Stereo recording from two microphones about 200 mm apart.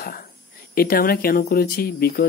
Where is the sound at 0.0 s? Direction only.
45° left (ahead or behind).